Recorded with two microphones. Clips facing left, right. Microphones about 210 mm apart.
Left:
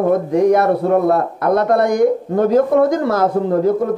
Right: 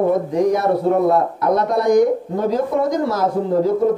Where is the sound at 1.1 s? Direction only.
55° left (ahead or behind).